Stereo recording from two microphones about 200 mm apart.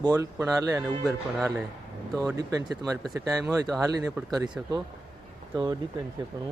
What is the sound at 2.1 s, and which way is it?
Speech, 20° right (ahead or behind).